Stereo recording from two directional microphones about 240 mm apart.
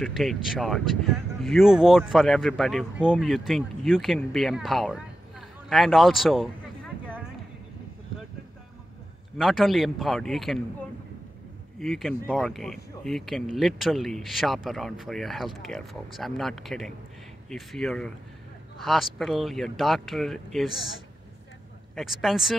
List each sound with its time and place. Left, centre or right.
0.0 s speech: centre
9.4 s speech: centre
11.8 s speech: centre
21.9 s speech: centre